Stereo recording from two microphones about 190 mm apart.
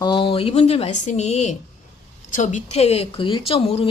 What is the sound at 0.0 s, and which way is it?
Speech, 25° left (ahead or behind).